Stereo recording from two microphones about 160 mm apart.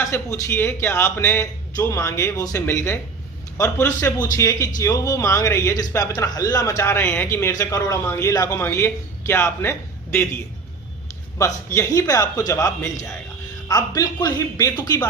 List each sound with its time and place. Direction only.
0.0 s a man's voice: 20° left (ahead or behind)
11.3 s a man's voice: 15° left (ahead or behind)